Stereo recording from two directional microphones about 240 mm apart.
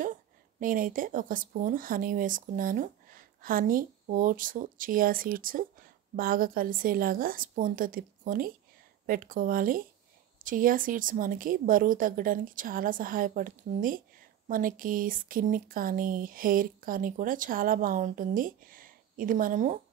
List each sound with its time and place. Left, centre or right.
0.6 s speech: right